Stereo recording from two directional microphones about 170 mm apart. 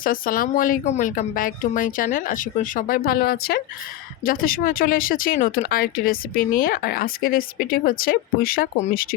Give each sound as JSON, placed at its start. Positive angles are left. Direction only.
{"t": 0.0, "sound": "speech", "side_deg": 55}